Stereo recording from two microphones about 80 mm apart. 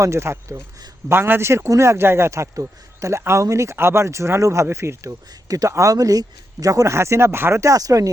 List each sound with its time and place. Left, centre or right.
0.0 s speech: right